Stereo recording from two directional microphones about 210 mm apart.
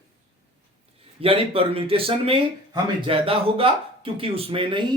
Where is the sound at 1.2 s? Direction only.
25° right (ahead or behind).